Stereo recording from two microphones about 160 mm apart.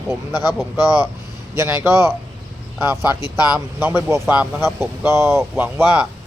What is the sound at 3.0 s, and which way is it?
Speech, 25° left (ahead or behind).